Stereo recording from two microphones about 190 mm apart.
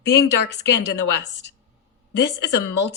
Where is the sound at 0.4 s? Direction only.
65° left (ahead or behind).